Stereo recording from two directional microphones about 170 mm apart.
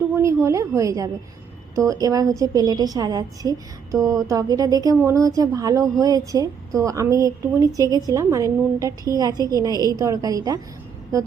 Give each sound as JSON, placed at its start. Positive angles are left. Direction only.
{"t": 0.2, "sound": "a woman's voice", "side_deg": -15}